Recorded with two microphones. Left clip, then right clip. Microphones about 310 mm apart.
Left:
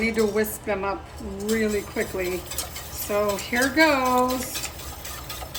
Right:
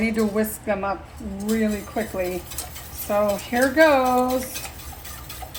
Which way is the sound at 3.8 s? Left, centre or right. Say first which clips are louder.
Right 3 dB; centre.